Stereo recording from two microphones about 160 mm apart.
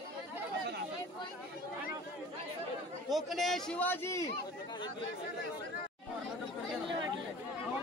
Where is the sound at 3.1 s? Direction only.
Centre (ahead or behind); by 4.3 s 15° left (ahead or behind).